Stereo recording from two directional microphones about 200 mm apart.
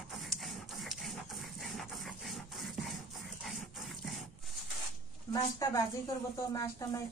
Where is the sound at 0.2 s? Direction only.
Centre (ahead or behind).